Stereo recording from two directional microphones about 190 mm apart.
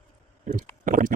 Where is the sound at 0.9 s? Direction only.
45° right (ahead or behind).